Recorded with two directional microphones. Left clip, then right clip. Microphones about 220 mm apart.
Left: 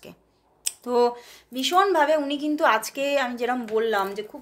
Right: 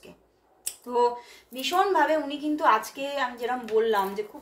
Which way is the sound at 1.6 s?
50° left (ahead or behind).